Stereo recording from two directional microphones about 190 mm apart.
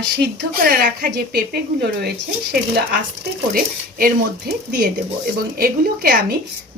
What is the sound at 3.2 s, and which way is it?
Speech, 50° right (ahead or behind).